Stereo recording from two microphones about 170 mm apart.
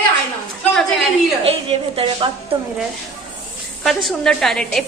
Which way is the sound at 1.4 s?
35° right (ahead or behind).